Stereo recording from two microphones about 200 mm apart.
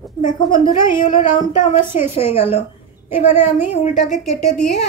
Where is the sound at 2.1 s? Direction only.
30° left (ahead or behind).